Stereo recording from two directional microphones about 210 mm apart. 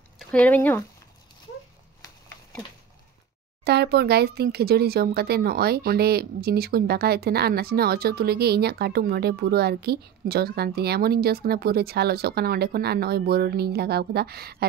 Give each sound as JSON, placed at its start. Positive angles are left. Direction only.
{"t": 0.2, "sound": "speech", "side_deg": 5}
{"t": 3.6, "sound": "speech", "side_deg": -50}